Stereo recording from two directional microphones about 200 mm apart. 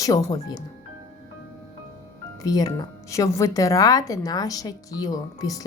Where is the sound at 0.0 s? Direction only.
20° left (ahead or behind).